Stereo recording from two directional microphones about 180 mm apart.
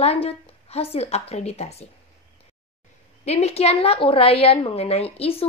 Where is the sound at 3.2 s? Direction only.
35° left (ahead or behind).